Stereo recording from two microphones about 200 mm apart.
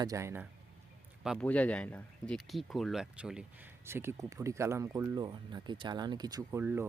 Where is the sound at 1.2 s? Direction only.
Centre (ahead or behind).